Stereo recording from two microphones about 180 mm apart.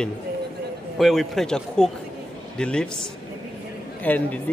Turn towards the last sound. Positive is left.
turn(degrees=10)  # may be behind; listen again after turning